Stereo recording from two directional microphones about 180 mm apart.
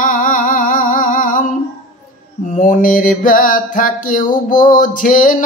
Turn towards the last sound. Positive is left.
turn(degrees=50)  # may be behind; listen again after turning